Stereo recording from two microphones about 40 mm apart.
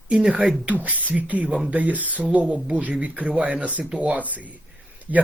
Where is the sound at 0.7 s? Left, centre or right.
Right.